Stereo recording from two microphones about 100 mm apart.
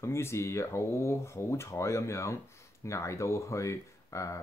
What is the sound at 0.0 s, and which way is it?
Speech, 25° left (ahead or behind).